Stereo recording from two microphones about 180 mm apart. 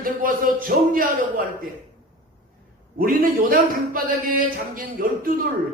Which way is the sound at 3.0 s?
50° right (ahead or behind).